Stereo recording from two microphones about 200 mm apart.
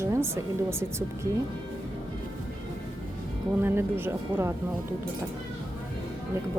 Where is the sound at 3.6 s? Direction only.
10° right (ahead or behind).